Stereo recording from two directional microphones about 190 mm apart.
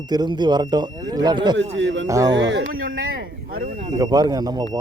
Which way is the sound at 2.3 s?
70° right (ahead or behind).